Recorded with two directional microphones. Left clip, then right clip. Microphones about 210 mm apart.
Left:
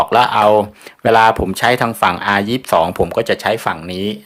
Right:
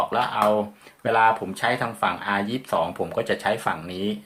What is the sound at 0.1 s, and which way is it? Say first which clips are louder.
Speech: left 10 dB; 55° left (ahead or behind).